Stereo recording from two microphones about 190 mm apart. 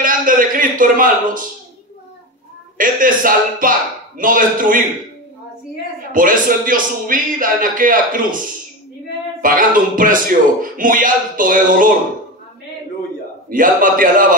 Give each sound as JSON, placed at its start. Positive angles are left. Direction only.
{"t": 0.0, "sound": "a man's voice", "side_deg": -45}
{"t": 2.8, "sound": "a man's voice", "side_deg": -45}
{"t": 6.1, "sound": "a man's voice", "side_deg": -45}
{"t": 9.4, "sound": "a man's voice", "side_deg": -45}
{"t": 13.5, "sound": "a man's voice", "side_deg": -45}